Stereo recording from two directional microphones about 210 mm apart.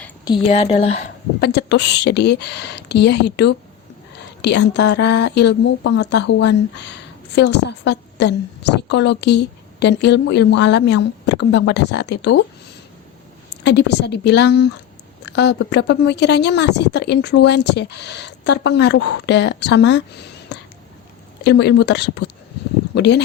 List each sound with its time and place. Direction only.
0.3 s a woman's voice: 25° left (ahead or behind)
1.4 s speech: 50° left (ahead or behind)
13.7 s a woman's voice: 55° left (ahead or behind)